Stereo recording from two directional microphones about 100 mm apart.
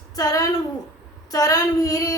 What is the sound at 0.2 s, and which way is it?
Child singing, 40° left (ahead or behind).